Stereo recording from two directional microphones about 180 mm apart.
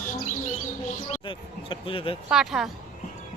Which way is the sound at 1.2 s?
30° left (ahead or behind).